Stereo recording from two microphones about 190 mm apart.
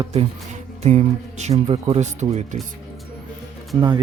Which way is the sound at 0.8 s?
35° right (ahead or behind).